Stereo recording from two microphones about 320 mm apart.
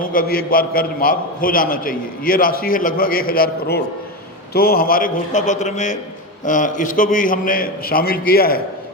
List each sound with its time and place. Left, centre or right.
0.0 s a man's voice: left